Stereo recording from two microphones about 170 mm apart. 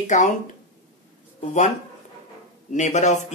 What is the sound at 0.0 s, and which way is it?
Speech, 45° left (ahead or behind).